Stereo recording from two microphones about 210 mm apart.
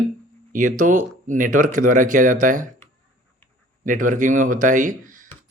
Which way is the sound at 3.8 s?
40° right (ahead or behind).